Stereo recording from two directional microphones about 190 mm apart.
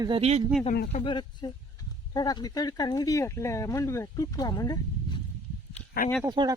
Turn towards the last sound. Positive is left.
turn(degrees=-20)  # may be behind; listen again after turning